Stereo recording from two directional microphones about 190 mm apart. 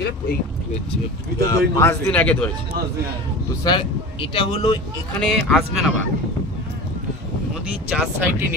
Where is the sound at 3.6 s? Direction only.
25° left (ahead or behind).